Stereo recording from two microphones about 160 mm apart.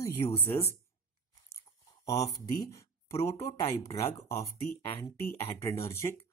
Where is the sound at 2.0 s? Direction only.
25° left (ahead or behind).